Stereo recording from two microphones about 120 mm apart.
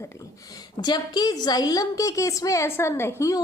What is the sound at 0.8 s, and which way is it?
A woman's voice, 35° left (ahead or behind).